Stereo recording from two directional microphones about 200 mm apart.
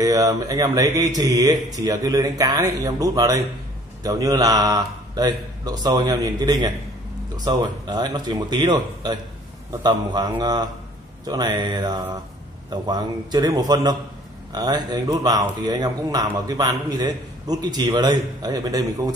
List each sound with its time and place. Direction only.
0.0 s a man's voice: 20° right (ahead or behind)